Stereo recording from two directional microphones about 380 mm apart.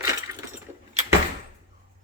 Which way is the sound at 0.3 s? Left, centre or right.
Centre.